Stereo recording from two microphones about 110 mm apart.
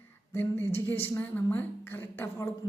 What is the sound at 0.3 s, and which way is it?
A woman's voice, 20° left (ahead or behind).